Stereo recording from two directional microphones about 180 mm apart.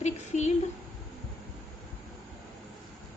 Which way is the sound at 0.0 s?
40° left (ahead or behind).